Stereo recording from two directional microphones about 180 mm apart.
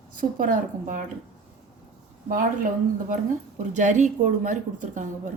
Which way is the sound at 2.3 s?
45° right (ahead or behind).